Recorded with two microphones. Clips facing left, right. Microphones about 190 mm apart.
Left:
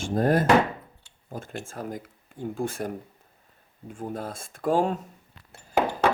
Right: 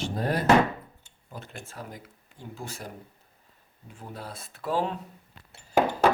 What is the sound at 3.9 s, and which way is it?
Speech, 50° left (ahead or behind).